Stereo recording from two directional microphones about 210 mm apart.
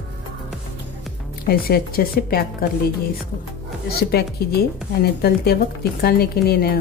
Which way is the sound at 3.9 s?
50° left (ahead or behind).